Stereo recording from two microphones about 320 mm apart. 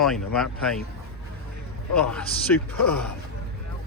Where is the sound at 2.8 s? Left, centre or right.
Left.